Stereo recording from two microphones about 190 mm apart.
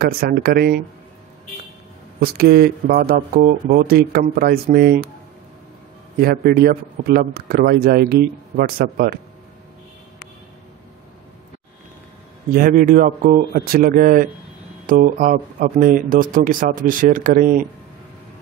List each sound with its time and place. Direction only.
0.0 s speech: 55° right (ahead or behind)
2.1 s speech: 55° right (ahead or behind)
6.1 s speech: 50° right (ahead or behind)
12.5 s speech: 45° right (ahead or behind)